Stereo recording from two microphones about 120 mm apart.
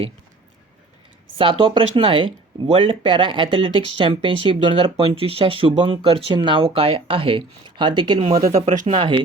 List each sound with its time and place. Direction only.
1.4 s speech: 45° right (ahead or behind)
8.6 s speech: 90° right
9.0 s speech: 40° right (ahead or behind)